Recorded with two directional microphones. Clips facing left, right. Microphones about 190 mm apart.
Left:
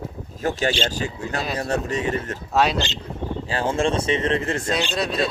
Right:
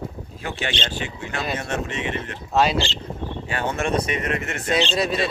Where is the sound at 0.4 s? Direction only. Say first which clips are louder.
Left 6 dB; 40° left (ahead or behind).